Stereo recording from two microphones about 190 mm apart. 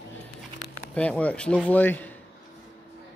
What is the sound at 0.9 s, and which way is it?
Speech, 5° left (ahead or behind).